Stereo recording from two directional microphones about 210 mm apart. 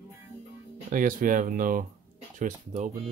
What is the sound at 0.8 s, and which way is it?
Speech, 40° right (ahead or behind).